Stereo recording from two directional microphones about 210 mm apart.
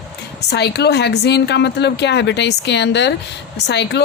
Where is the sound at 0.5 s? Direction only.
50° left (ahead or behind).